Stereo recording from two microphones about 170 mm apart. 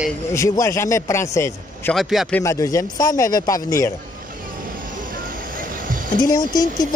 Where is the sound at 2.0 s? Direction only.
Centre (ahead or behind).